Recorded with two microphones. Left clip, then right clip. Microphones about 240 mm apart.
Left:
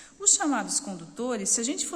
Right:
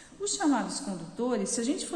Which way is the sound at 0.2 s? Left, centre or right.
Left.